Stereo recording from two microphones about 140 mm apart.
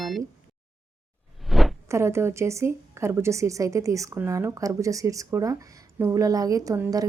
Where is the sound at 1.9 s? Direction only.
20° right (ahead or behind).